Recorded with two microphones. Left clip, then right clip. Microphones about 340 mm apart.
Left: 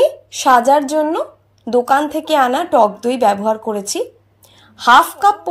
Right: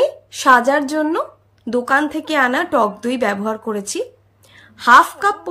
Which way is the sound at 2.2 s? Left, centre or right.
Centre.